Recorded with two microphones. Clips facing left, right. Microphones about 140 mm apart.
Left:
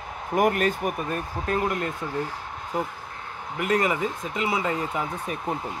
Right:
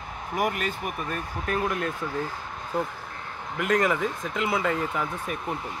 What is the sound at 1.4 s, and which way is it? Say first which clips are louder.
Speech: left 2 dB; 30° left (ahead or behind).